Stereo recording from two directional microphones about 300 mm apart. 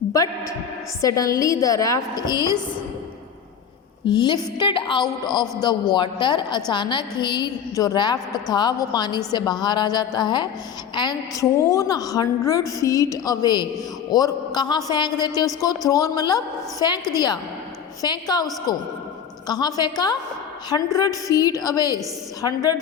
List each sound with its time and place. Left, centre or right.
0.1 s a woman's voice: centre
4.1 s a woman's voice: centre